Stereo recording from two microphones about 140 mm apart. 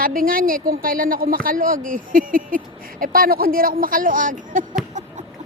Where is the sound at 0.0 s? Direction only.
90° right.